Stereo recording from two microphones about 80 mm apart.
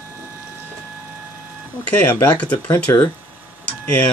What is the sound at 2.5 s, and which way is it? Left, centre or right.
Speech, left.